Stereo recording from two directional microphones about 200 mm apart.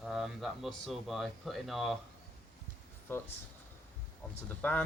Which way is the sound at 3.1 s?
10° left (ahead or behind).